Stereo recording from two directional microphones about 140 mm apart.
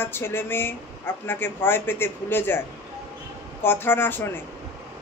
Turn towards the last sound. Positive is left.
turn(degrees=15)  # may be behind; listen again after turning